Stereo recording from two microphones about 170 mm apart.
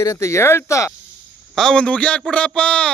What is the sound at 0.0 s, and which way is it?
Speech, 15° left (ahead or behind).